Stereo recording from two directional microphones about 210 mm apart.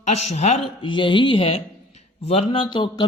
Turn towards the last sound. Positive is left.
turn(degrees=25)  # may be behind; listen again after turning